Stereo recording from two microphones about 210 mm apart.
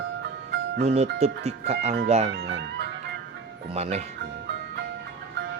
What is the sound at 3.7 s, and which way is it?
Speech, 30° right (ahead or behind).